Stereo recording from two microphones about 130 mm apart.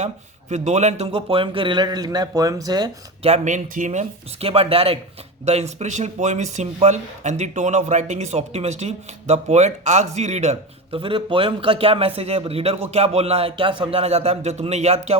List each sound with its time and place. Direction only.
0.5 s a man's voice: 65° right (ahead or behind); by 2.9 s 30° right (ahead or behind)
3.2 s speech: 60° right (ahead or behind)
4.4 s speech: 45° right (ahead or behind)
5.5 s speech: 60° right (ahead or behind)